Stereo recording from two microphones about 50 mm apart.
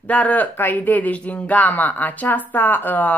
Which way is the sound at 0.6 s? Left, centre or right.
Left.